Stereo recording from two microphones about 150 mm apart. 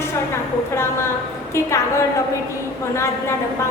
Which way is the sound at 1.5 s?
20° left (ahead or behind).